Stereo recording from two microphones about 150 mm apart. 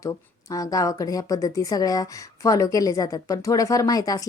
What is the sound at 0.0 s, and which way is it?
Speech, 20° left (ahead or behind).